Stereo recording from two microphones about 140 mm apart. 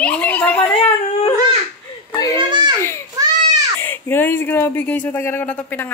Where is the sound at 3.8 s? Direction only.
15° left (ahead or behind).